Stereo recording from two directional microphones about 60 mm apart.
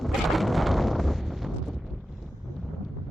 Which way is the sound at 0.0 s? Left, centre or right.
Centre.